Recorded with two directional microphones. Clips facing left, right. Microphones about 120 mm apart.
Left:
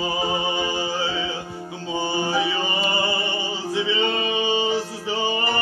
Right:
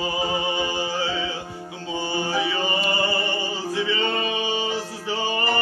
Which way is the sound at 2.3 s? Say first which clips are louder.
Left 1 dB; 20° left (ahead or behind).